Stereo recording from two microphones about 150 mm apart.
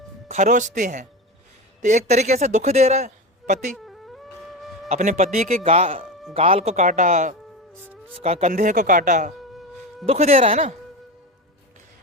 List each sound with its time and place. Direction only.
0.3 s a man's voice: 55° right (ahead or behind)
3.8 s music: centre (ahead or behind)
4.9 s a man's voice: 55° right (ahead or behind)
7.8 s music: 15° right (ahead or behind)
8.2 s a man's voice: 45° right (ahead or behind)
8.5 s speech: 60° right (ahead or behind)
9.4 s music: centre (ahead or behind)
10.1 s a man's voice: 45° right (ahead or behind)